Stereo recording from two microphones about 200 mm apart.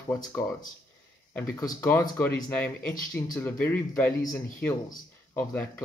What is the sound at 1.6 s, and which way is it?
Speech, 15° left (ahead or behind).